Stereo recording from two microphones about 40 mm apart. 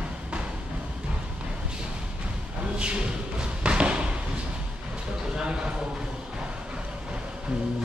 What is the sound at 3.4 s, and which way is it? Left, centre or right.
Thump, right.